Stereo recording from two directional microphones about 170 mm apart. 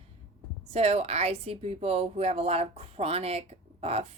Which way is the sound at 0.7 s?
35° right (ahead or behind).